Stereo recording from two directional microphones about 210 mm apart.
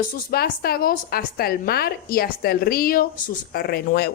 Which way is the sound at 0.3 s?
45° left (ahead or behind).